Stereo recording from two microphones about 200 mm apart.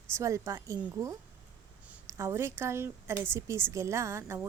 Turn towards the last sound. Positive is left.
turn(degrees=-15)  # may be behind; listen again after turning